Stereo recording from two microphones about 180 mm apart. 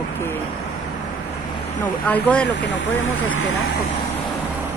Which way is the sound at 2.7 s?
90° left.